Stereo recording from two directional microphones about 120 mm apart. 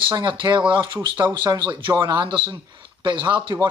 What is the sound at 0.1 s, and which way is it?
Speech, 40° right (ahead or behind).